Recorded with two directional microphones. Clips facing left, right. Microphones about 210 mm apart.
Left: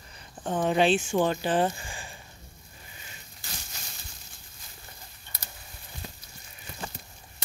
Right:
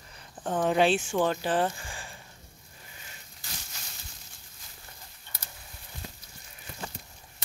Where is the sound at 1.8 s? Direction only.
15° left (ahead or behind).